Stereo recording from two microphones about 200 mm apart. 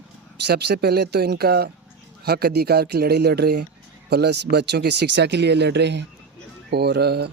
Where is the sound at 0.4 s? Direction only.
55° right (ahead or behind).